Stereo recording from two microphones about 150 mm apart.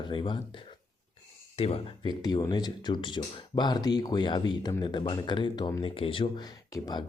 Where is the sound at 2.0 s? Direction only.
25° left (ahead or behind).